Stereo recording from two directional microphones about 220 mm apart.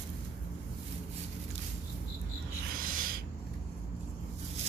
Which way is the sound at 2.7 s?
40° right (ahead or behind).